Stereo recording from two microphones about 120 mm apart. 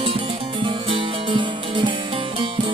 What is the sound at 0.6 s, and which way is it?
Music, 45° right (ahead or behind).